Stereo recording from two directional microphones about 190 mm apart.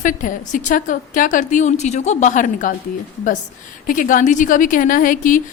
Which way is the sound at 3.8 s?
45° left (ahead or behind).